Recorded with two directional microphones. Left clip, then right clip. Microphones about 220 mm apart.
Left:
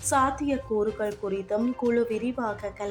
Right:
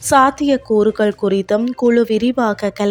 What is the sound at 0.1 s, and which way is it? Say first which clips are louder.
A woman's voice: right 12 dB; 35° right (ahead or behind).